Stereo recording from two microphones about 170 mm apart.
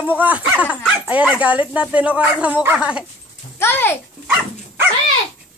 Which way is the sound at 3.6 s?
15° left (ahead or behind).